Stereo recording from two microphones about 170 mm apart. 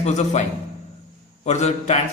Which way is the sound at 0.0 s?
45° left (ahead or behind).